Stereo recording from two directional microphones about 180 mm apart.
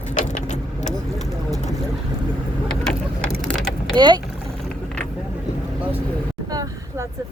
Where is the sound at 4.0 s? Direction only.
25° right (ahead or behind).